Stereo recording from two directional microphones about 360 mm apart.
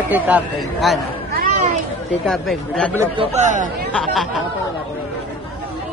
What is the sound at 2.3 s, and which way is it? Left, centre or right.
Speech, centre.